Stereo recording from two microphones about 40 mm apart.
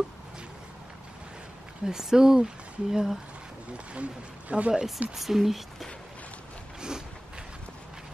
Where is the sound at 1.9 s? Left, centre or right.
Centre.